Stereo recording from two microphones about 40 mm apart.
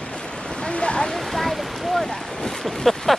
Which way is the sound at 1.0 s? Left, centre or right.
Centre.